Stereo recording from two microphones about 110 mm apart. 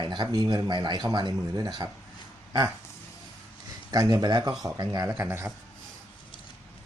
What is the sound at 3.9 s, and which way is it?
Speech, 35° right (ahead or behind).